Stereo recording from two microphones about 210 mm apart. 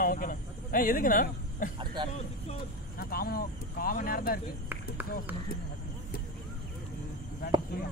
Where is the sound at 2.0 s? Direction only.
20° right (ahead or behind).